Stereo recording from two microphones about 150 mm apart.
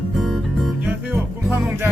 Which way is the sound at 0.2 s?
Centre (ahead or behind).